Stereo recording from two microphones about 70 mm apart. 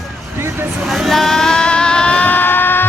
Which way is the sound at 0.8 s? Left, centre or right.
Centre.